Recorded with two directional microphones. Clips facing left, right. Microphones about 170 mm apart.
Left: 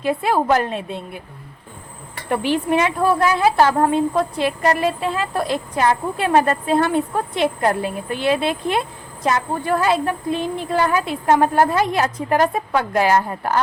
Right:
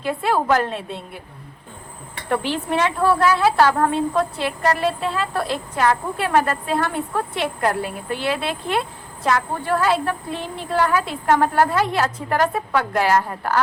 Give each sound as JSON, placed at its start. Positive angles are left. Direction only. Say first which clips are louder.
{"t": 0.0, "sound": "a woman's voice", "louder": "left 2 dB", "side_deg": 15}
{"t": 2.3, "sound": "a woman's voice", "louder": "left 3 dB", "side_deg": 15}